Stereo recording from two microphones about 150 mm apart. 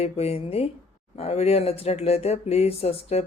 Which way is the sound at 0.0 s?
40° left (ahead or behind).